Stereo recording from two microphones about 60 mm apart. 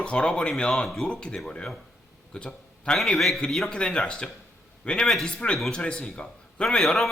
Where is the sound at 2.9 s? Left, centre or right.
Centre.